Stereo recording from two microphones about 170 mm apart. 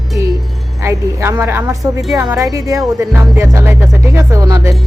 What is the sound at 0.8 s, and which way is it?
Speech, 15° right (ahead or behind).